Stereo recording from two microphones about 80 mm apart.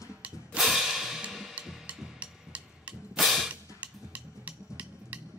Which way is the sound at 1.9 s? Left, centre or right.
Centre.